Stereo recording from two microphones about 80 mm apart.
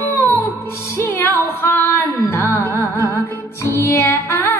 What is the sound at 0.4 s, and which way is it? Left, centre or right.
Music, left.